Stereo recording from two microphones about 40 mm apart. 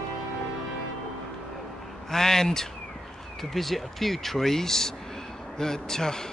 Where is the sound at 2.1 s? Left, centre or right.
Centre.